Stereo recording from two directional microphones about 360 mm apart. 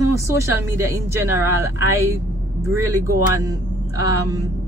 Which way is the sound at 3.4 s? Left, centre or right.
Centre.